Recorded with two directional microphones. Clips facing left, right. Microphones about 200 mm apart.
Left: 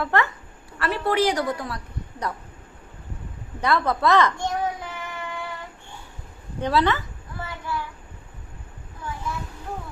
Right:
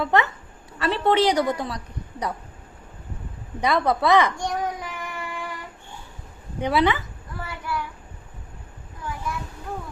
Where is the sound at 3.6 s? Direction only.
15° right (ahead or behind).